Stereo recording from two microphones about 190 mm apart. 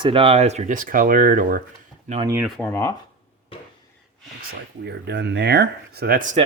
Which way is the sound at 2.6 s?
15° left (ahead or behind).